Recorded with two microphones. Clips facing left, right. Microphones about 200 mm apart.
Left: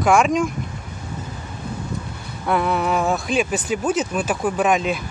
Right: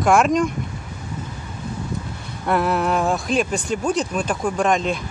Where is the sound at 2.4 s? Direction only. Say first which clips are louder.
Right 1 dB; centre (ahead or behind).